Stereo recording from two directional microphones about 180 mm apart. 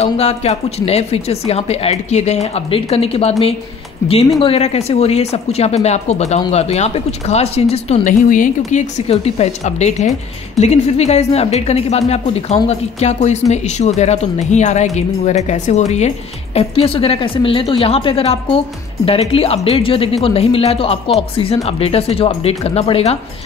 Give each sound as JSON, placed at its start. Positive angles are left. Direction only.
{"t": 0.0, "sound": "speech", "side_deg": 35}